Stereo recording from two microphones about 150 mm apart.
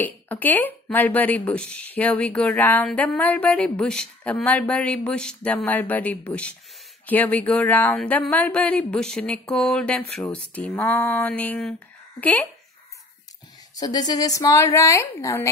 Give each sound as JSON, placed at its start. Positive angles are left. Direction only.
{"t": 0.0, "sound": "speech", "side_deg": 10}
{"t": 13.7, "sound": "a woman's voice", "side_deg": 25}